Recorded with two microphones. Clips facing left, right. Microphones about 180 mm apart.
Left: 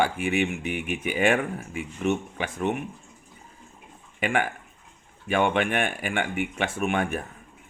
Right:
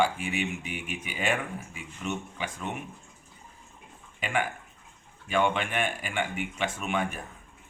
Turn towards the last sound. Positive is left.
turn(degrees=55)  # may be behind; listen again after turning